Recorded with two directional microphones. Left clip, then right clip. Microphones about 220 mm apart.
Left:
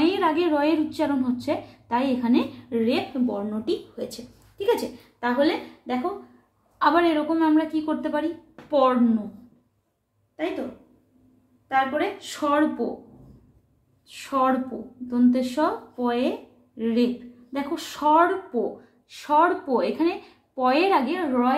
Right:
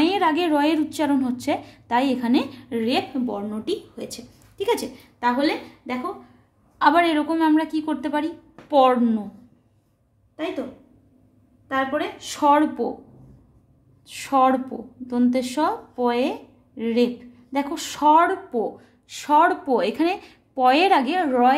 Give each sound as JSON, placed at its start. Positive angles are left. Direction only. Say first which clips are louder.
{"t": 0.0, "sound": "speech", "louder": "right 2 dB", "side_deg": -45}
{"t": 5.2, "sound": "a woman's voice", "louder": "right 1 dB", "side_deg": -50}
{"t": 11.7, "sound": "speech", "louder": "left 1 dB", "side_deg": -45}
{"t": 14.0, "sound": "speech", "louder": "right 4 dB", "side_deg": -45}